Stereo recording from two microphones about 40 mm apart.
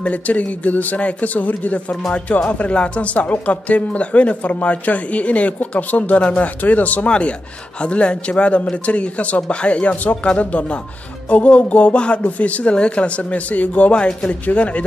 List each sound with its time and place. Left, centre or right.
0.0 s speech: left
7.1 s a man's voice: left